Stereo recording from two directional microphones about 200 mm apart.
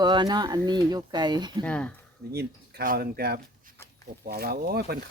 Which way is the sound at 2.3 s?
50° right (ahead or behind).